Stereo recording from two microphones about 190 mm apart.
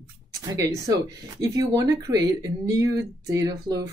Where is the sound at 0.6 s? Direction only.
15° right (ahead or behind).